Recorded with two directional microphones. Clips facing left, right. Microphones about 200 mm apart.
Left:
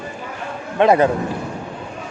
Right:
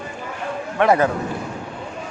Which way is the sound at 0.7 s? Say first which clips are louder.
Left 3 dB; 20° left (ahead or behind).